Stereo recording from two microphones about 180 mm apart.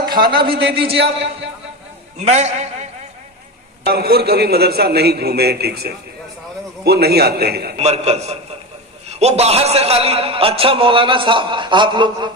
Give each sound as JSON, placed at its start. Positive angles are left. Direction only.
{"t": 0.3, "sound": "a man's voice", "side_deg": -30}
{"t": 2.2, "sound": "a man's voice", "side_deg": -40}
{"t": 3.8, "sound": "a man's voice", "side_deg": -60}
{"t": 7.8, "sound": "a man's voice", "side_deg": -35}